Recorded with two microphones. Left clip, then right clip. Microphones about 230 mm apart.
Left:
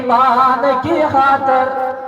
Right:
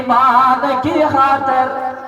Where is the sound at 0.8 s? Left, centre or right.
Left.